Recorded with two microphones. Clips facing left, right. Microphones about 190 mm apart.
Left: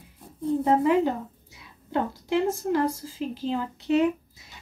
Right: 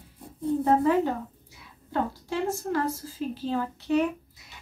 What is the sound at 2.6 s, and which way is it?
A woman's voice, 15° left (ahead or behind).